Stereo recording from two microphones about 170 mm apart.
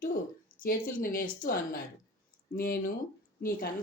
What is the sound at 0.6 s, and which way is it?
Speech, 55° left (ahead or behind).